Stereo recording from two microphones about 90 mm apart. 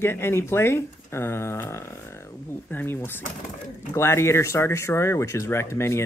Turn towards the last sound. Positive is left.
turn(degrees=30)  # may be behind; listen again after turning